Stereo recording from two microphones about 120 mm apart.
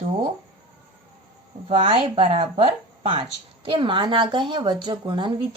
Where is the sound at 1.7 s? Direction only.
50° right (ahead or behind).